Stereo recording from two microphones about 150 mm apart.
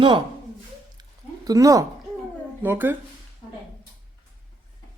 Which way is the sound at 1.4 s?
25° right (ahead or behind).